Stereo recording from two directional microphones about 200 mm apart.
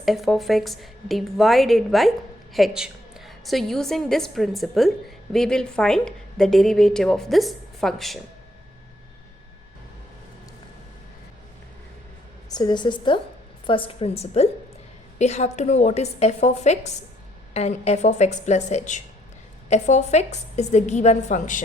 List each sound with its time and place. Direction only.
0.0 s a woman's voice: centre (ahead or behind)
12.5 s a woman's voice: 20° left (ahead or behind); by 21.6 s 40° left (ahead or behind)